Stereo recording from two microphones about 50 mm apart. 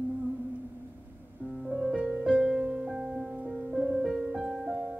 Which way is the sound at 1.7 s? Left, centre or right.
Centre.